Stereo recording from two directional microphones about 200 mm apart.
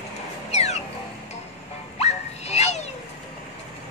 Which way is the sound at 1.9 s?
35° left (ahead or behind).